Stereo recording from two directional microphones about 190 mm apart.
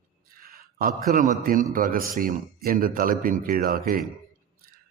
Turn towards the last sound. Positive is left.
turn(degrees=-50)  # may be behind; listen again after turning